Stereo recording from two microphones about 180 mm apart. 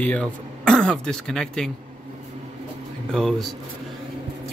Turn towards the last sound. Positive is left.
turn(degrees=0)  # may be behind; listen again after turning